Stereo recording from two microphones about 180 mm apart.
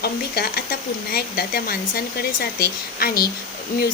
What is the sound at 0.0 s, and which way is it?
Speech, 60° left (ahead or behind).